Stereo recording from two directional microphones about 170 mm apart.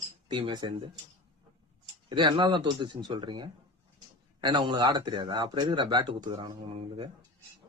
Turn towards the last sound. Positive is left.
turn(degrees=-30)  # may be behind; listen again after turning